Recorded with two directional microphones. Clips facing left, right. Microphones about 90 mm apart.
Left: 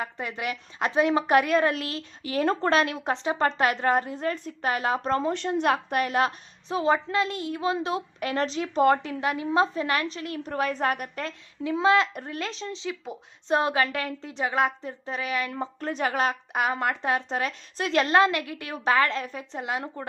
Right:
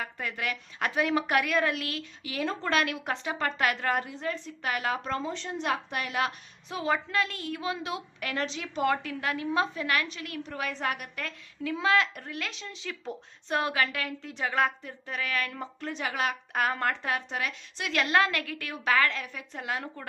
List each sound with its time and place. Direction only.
0.0 s a woman's voice: 20° left (ahead or behind)
4.1 s a woman's voice: 45° left (ahead or behind)
4.7 s a woman's voice: 30° left (ahead or behind)
5.2 s a woman's voice: 60° left (ahead or behind)
6.0 s a woman's voice: 40° left (ahead or behind)
9.2 s a woman's voice: 20° left (ahead or behind)
10.4 s a woman's voice: 45° left (ahead or behind); by 15.7 s 25° left (ahead or behind)
15.8 s a woman's voice: 45° left (ahead or behind)
16.5 s speech: 15° left (ahead or behind)
17.1 s a woman's voice: 30° left (ahead or behind)
19.5 s a woman's voice: 20° left (ahead or behind)